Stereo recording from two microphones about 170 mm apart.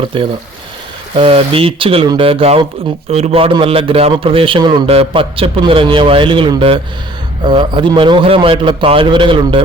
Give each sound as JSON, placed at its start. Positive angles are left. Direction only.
{"t": 0.1, "sound": "a man's voice", "side_deg": -30}